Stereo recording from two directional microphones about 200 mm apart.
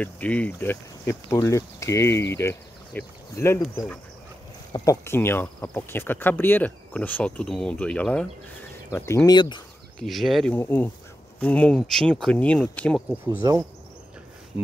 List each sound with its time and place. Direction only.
0.0 s speech: 5° left (ahead or behind)
4.7 s speech: 15° left (ahead or behind)
9.9 s speech: centre (ahead or behind)
13.4 s speech: 20° right (ahead or behind)